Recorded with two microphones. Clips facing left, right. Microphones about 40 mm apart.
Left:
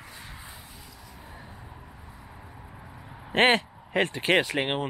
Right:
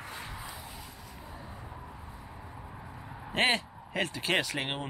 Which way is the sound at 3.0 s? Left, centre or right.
Centre.